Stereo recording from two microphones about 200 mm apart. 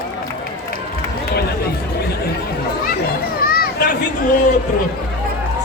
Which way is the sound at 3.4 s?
50° left (ahead or behind).